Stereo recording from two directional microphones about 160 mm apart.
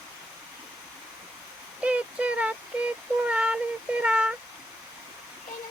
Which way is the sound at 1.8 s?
10° right (ahead or behind).